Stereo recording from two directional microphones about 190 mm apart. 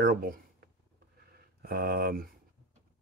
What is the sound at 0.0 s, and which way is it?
Speech, 50° right (ahead or behind).